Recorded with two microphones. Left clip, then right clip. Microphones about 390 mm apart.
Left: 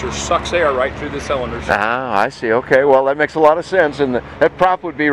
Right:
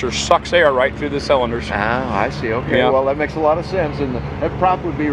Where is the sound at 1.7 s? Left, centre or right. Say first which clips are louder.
Left 3 dB; left.